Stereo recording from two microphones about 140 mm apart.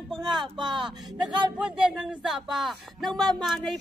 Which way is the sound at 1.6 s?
5° right (ahead or behind).